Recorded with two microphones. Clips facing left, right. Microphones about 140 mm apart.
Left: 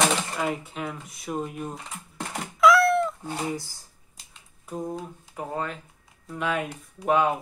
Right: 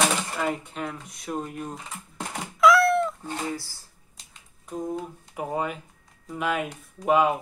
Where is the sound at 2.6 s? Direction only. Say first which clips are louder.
Even; centre (ahead or behind).